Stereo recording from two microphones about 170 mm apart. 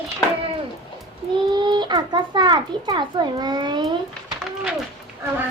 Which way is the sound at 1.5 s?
25° right (ahead or behind).